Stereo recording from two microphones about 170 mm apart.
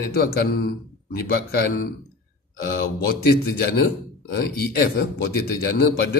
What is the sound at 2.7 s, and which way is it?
A man's voice, 65° left (ahead or behind).